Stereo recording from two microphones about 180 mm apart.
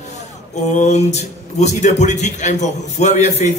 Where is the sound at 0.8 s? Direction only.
40° left (ahead or behind).